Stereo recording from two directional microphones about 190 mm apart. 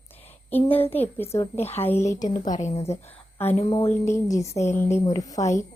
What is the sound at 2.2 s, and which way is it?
Speech, 40° left (ahead or behind).